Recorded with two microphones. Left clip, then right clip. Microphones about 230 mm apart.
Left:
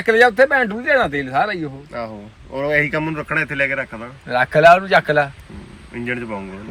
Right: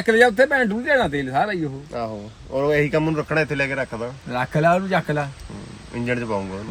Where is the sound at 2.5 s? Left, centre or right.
Centre.